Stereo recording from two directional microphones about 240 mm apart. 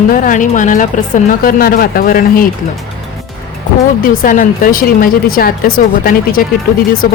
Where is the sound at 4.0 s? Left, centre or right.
Left.